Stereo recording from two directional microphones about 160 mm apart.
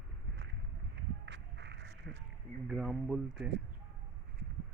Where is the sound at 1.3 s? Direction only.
90° right.